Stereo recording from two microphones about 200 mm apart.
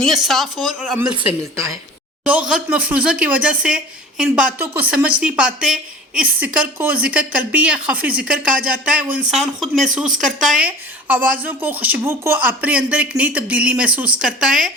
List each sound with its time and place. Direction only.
0.0 s speech: centre (ahead or behind)
2.5 s a woman's voice: 5° right (ahead or behind)